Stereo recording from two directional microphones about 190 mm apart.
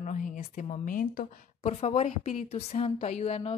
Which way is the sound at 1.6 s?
35° left (ahead or behind).